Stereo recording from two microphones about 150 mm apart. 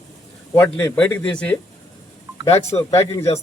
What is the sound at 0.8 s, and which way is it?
Speech, 10° left (ahead or behind).